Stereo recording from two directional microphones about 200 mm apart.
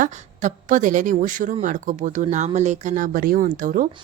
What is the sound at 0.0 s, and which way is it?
A woman's voice, 40° right (ahead or behind).